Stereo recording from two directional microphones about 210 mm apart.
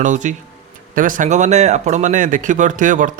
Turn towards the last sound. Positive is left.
turn(degrees=-40)  # may be behind; listen again after turning